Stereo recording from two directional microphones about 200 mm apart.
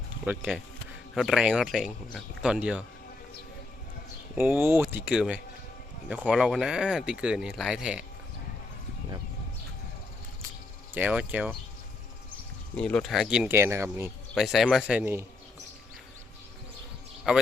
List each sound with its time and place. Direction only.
0.3 s speech: centre (ahead or behind)
4.4 s speech: 10° right (ahead or behind)
10.9 s speech: 5° right (ahead or behind)
12.7 s speech: 5° left (ahead or behind); by 14.1 s 10° right (ahead or behind)
14.3 s speech: centre (ahead or behind)
17.3 s speech: 5° right (ahead or behind)